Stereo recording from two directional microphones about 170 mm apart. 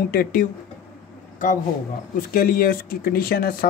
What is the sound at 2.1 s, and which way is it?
Speech, 55° left (ahead or behind).